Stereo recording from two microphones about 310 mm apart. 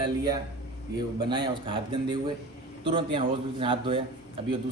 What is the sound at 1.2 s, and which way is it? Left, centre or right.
A man's voice, centre.